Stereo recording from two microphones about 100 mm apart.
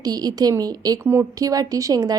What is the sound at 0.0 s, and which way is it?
A woman's voice, 40° right (ahead or behind).